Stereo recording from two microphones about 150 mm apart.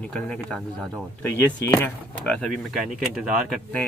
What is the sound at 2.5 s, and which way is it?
Speech, centre (ahead or behind).